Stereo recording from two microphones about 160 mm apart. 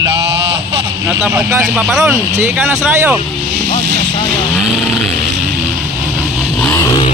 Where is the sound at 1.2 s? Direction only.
10° right (ahead or behind).